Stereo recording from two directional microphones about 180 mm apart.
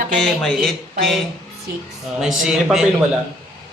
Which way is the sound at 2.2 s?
5° right (ahead or behind).